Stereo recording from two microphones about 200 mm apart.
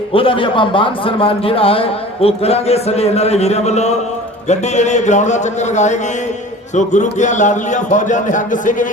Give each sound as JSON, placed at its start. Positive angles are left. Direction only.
{"t": 0.1, "sound": "a man's voice", "side_deg": 25}